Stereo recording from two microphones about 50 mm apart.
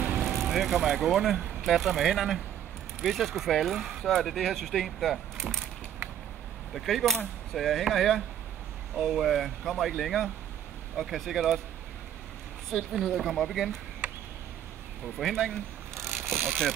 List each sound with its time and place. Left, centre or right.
0.2 s speech: centre
6.7 s speech: centre
12.7 s speech: centre
15.1 s speech: centre
16.0 s vehicle: centre